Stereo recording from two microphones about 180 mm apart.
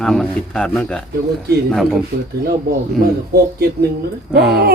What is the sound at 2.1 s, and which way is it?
Speech, 50° right (ahead or behind).